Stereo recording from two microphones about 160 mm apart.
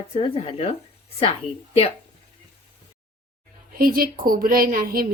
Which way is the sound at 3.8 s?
65° right (ahead or behind).